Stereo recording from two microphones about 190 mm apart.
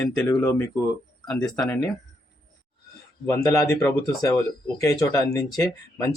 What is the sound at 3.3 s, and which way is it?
Speech, 15° left (ahead or behind).